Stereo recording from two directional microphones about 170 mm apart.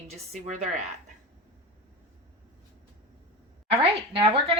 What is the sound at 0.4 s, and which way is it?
Speech, 45° right (ahead or behind).